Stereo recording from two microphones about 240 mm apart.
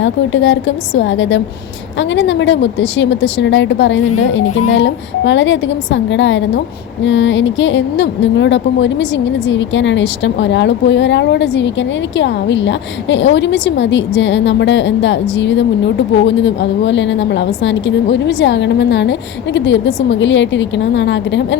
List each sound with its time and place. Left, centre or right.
0.0 s speech: left